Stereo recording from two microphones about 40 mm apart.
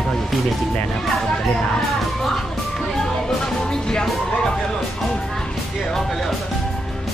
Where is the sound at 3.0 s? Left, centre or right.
Centre.